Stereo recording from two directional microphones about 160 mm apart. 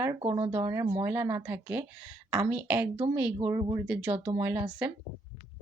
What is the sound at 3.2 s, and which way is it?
Speech, 10° right (ahead or behind).